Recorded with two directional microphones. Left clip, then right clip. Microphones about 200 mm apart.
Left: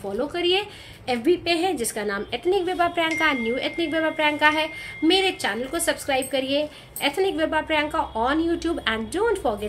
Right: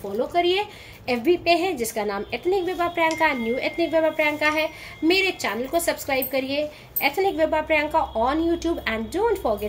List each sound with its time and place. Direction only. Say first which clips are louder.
0.3 s a woman's voice: right 2 dB; 15° left (ahead or behind)